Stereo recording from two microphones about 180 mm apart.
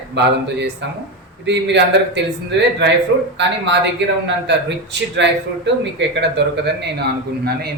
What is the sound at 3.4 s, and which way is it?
A man's voice, 75° right (ahead or behind).